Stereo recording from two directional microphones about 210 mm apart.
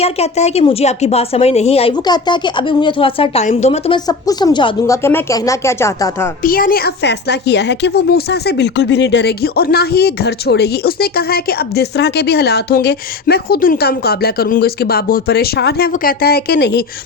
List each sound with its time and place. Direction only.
0.0 s a woman's voice: 30° left (ahead or behind); by 6.3 s 15° left (ahead or behind)
6.4 s speech: 45° left (ahead or behind)